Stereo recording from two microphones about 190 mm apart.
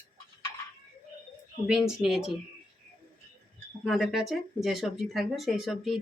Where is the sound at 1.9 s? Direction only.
Centre (ahead or behind).